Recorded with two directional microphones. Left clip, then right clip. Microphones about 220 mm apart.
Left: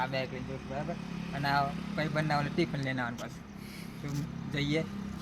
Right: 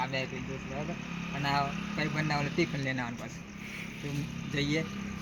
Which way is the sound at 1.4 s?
Centre (ahead or behind).